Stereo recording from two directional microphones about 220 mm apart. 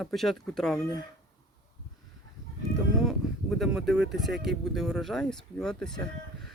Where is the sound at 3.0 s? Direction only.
Centre (ahead or behind).